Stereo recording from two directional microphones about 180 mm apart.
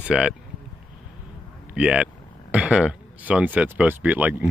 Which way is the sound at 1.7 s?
5° right (ahead or behind).